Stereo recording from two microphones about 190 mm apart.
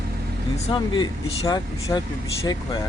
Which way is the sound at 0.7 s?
25° left (ahead or behind).